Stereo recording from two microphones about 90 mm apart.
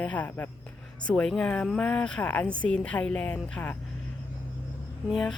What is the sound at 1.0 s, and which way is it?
A woman's voice, 10° left (ahead or behind).